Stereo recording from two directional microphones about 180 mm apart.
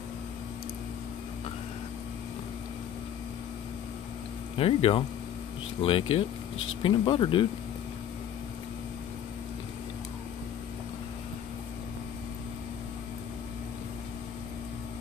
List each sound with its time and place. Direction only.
4.6 s speech: 30° left (ahead or behind)